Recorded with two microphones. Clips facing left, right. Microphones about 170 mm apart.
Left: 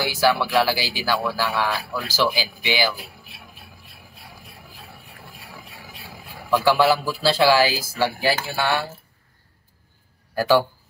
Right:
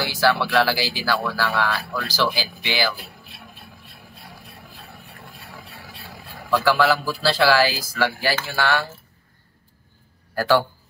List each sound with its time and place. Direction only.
0.0 s speech: 15° left (ahead or behind)
5.4 s speech: 15° left (ahead or behind)